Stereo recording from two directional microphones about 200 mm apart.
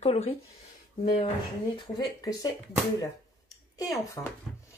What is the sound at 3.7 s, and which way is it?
Speech, 15° left (ahead or behind).